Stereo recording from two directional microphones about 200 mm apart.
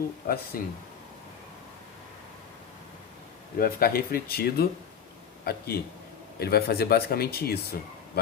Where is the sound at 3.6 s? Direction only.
50° left (ahead or behind).